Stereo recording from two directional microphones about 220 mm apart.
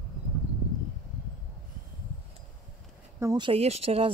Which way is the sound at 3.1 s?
15° right (ahead or behind).